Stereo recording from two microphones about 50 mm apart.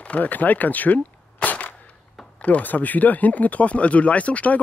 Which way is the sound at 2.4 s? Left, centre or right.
Left.